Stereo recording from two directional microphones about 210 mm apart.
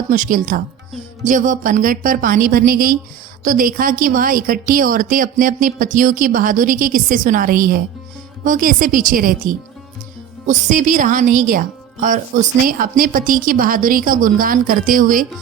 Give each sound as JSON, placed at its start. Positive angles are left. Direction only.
{"t": 0.1, "sound": "a woman's voice", "side_deg": -40}